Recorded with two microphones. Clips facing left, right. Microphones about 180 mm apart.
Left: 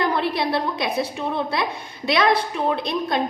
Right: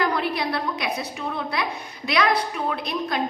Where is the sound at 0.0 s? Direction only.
30° left (ahead or behind).